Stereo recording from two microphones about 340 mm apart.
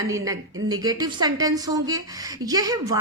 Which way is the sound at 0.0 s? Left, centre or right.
Centre.